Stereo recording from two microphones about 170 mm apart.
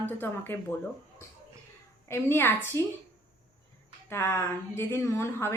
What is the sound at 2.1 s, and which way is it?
Speech, 15° left (ahead or behind).